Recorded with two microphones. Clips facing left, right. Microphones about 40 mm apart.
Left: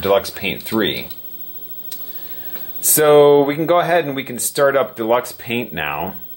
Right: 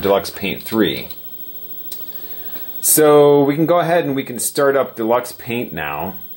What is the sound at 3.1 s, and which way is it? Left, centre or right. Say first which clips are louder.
Speech: left 2 dB; left.